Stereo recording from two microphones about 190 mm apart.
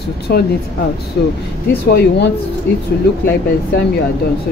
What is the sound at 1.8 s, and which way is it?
Speech, 55° left (ahead or behind).